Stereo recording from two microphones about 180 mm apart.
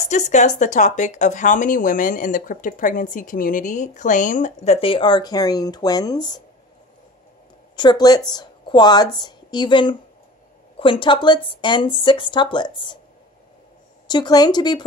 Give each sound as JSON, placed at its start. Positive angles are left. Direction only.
{"t": 0.1, "sound": "speech", "side_deg": 40}
{"t": 7.7, "sound": "a woman's voice", "side_deg": 25}
{"t": 14.0, "sound": "speech", "side_deg": 25}